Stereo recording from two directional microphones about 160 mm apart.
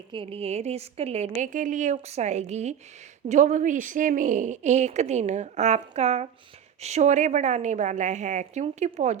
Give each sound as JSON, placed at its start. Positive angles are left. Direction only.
{"t": 0.1, "sound": "a woman's voice", "side_deg": -35}
{"t": 1.4, "sound": "speech", "side_deg": -55}